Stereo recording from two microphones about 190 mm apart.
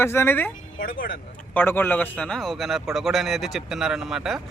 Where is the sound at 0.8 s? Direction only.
50° left (ahead or behind).